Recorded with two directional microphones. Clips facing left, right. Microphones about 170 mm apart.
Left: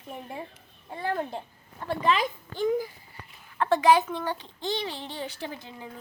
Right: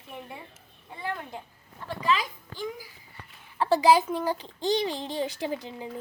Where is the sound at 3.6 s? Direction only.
35° right (ahead or behind).